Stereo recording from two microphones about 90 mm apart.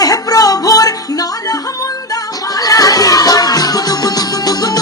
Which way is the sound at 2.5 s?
45° left (ahead or behind).